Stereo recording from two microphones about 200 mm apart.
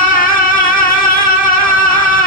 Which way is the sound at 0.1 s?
45° left (ahead or behind).